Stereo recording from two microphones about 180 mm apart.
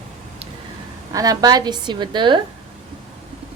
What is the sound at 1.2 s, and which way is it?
A woman's voice, 20° right (ahead or behind).